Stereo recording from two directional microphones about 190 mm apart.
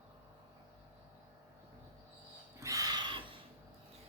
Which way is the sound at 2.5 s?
15° right (ahead or behind).